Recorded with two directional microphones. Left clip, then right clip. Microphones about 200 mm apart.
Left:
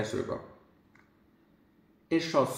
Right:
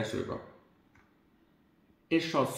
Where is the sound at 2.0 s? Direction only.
45° right (ahead or behind).